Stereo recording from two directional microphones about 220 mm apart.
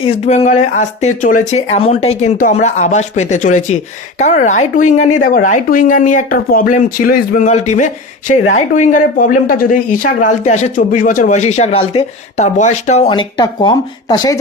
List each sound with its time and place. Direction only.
0.0 s speech: 30° left (ahead or behind)